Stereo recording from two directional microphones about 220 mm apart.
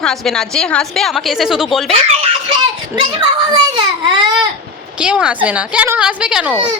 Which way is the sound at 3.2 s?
20° right (ahead or behind).